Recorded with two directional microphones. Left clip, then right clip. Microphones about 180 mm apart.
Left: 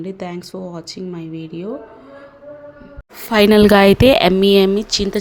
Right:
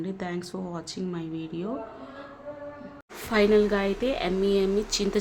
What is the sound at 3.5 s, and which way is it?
Speech, 70° left (ahead or behind).